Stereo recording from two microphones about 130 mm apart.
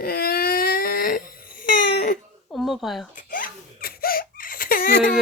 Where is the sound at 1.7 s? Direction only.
90° left.